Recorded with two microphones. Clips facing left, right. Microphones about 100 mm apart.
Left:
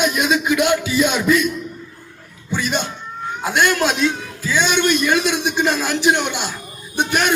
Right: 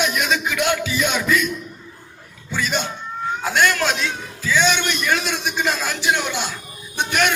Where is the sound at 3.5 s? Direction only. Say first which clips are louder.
Left 2 dB; 20° left (ahead or behind).